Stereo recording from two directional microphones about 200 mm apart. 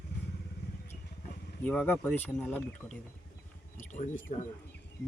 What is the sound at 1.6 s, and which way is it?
Speech, 5° left (ahead or behind).